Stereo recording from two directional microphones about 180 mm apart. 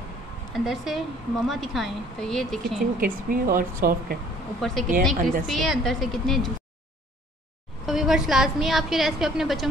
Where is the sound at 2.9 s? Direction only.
50° right (ahead or behind).